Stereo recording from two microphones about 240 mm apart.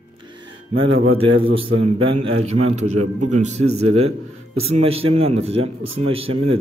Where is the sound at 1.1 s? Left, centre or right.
Right.